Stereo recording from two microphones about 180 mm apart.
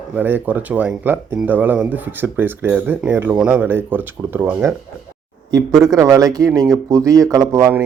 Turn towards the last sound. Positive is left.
turn(degrees=-15)  # may be behind; listen again after turning